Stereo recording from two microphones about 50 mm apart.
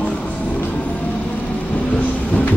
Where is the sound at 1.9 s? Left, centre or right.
Left.